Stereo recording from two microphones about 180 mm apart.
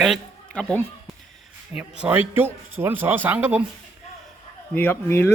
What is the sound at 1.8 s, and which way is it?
Speech, 5° right (ahead or behind).